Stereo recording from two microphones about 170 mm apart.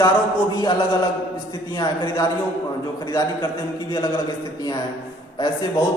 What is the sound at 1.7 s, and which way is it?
Speech, 25° left (ahead or behind).